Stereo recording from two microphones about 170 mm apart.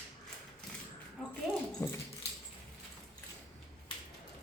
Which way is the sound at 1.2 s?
5° left (ahead or behind).